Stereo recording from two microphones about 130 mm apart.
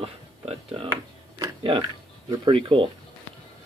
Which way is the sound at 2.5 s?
45° right (ahead or behind).